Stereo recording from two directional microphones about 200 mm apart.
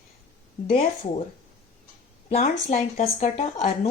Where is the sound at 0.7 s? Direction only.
45° left (ahead or behind).